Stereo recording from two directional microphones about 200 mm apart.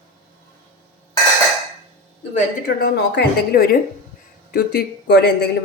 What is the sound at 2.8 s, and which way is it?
A woman's voice, 55° left (ahead or behind).